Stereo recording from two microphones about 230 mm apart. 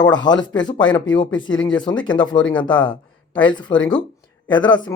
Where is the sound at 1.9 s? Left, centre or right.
Centre.